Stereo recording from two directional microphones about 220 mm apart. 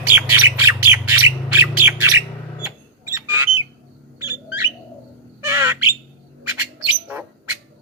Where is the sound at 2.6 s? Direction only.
10° right (ahead or behind).